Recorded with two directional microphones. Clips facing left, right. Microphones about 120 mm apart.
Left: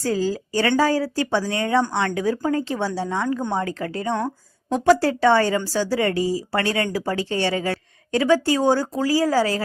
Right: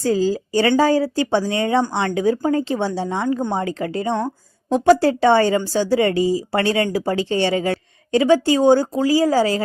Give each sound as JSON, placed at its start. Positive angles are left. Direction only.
{"t": 0.8, "sound": "speech", "side_deg": -25}